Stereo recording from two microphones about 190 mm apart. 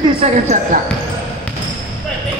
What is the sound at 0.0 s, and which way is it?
Speech, 30° right (ahead or behind).